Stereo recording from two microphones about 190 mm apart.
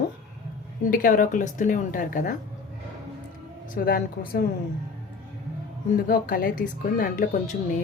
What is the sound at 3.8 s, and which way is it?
Speech, 50° left (ahead or behind).